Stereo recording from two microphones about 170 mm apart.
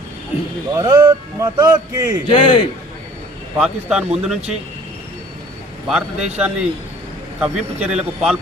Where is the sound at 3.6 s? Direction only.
5° right (ahead or behind).